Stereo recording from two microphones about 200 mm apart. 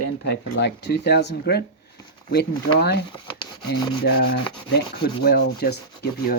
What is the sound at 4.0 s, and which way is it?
Speech, 50° left (ahead or behind).